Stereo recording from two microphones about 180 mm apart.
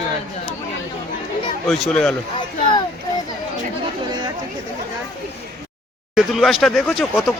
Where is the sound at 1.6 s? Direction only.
Centre (ahead or behind).